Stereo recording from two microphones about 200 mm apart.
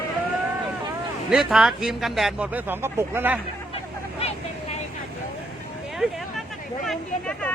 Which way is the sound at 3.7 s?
30° left (ahead or behind).